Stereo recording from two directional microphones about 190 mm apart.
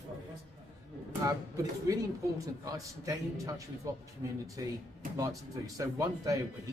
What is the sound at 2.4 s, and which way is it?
A man's voice, 15° right (ahead or behind).